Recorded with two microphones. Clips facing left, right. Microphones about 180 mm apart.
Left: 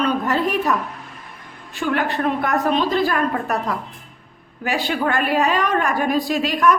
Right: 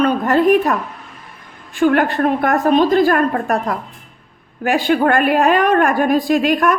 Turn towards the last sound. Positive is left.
turn(degrees=-50)  # may be behind; listen again after turning